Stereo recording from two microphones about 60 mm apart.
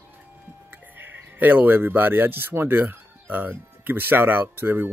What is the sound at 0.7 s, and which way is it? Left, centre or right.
Speech, right.